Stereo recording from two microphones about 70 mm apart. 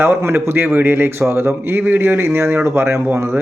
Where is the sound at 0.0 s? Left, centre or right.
Right.